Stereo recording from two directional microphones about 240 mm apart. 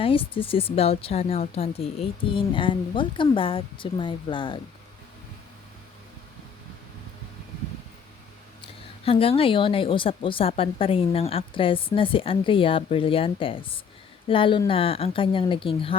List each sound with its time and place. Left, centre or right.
0.0 s a woman's voice: left
8.6 s a woman's voice: left